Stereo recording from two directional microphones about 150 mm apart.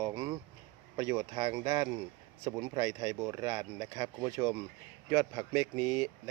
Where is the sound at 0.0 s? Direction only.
25° right (ahead or behind).